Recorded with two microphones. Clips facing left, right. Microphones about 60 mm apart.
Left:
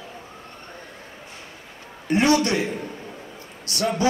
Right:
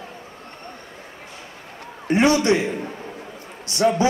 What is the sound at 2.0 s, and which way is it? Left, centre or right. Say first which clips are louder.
A man's voice: right 2 dB; right.